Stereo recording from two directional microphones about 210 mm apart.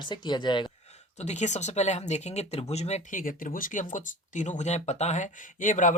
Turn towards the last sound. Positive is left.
turn(degrees=40)  # may be behind; listen again after turning